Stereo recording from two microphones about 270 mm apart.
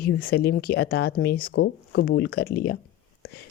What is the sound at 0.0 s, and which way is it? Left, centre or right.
Speech, left.